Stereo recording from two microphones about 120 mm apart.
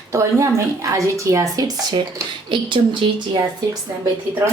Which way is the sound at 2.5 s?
45° right (ahead or behind).